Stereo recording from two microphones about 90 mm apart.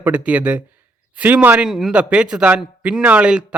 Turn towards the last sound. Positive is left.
turn(degrees=-10)  # may be behind; listen again after turning